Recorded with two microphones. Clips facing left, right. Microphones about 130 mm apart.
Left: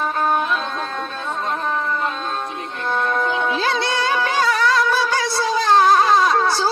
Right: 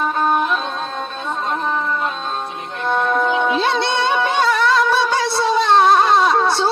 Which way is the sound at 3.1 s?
20° right (ahead or behind).